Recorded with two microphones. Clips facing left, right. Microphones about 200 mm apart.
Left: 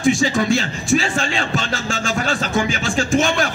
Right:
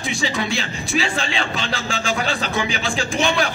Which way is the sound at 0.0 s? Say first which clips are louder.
Left 7 dB; 50° left (ahead or behind).